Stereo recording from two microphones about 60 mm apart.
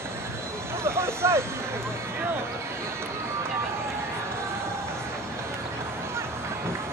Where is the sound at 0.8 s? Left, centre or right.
Right.